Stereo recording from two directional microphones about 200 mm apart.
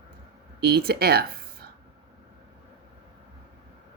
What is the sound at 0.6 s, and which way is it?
Speech, 50° right (ahead or behind).